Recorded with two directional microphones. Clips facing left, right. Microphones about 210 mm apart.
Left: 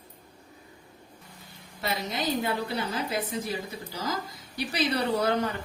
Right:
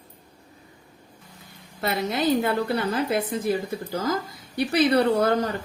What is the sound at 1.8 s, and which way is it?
A woman's voice, 55° right (ahead or behind).